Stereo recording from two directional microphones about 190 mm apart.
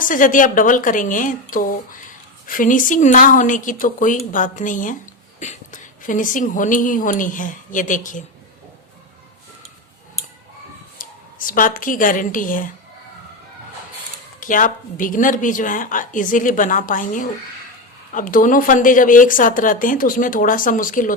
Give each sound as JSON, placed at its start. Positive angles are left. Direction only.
{"t": 0.0, "sound": "a woman's voice", "side_deg": 45}
{"t": 10.9, "sound": "a woman's voice", "side_deg": 45}
{"t": 14.4, "sound": "speech", "side_deg": 45}